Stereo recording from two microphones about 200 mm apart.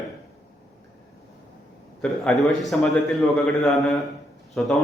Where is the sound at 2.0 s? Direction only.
5° left (ahead or behind).